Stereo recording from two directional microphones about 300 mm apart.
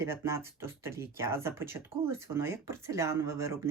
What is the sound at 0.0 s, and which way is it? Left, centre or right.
Speech, centre.